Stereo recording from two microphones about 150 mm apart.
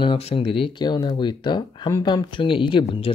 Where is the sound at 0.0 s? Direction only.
40° left (ahead or behind).